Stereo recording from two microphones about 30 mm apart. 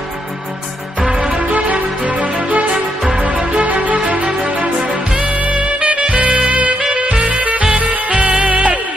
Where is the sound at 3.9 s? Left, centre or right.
Right.